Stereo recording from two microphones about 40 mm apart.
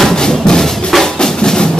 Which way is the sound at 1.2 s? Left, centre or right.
Centre.